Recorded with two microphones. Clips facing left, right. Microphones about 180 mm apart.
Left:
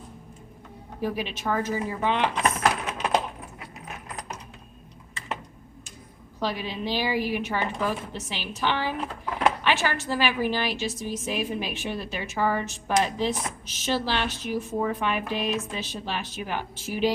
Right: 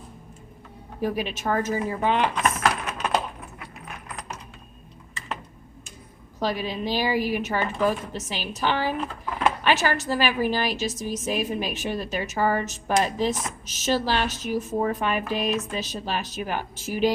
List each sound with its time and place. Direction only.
1.0 s a woman's voice: 45° right (ahead or behind)
2.3 s a sound: 20° left (ahead or behind)
6.4 s a woman's voice: 45° right (ahead or behind)